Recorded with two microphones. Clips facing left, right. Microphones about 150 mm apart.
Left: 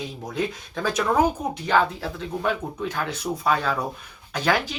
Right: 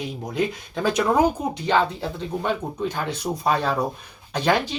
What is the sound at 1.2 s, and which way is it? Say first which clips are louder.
Speech: right 1 dB; 20° right (ahead or behind).